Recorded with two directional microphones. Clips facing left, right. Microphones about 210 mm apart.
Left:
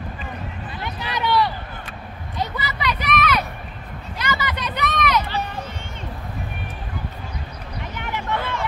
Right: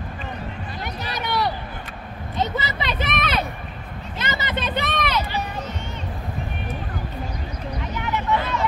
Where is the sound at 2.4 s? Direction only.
25° right (ahead or behind).